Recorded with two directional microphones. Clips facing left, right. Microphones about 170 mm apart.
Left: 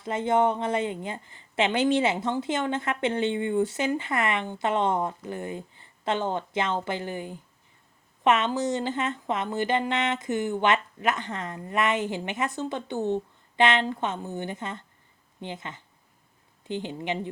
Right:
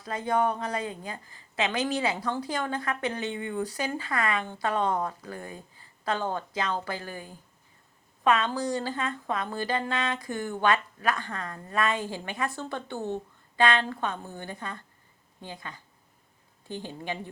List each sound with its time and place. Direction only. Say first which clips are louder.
0.0 s a woman's voice: left 3 dB; 25° left (ahead or behind)